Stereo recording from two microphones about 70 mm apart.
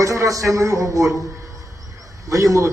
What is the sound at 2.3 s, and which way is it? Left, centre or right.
Speech, right.